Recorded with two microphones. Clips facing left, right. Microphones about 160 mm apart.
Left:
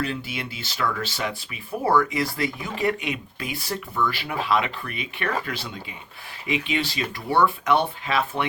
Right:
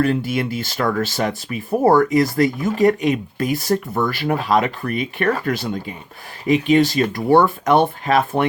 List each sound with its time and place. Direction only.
0.0 s speech: 50° right (ahead or behind)